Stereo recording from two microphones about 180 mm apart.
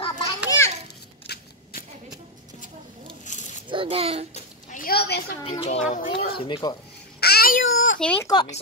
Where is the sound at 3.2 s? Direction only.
40° left (ahead or behind).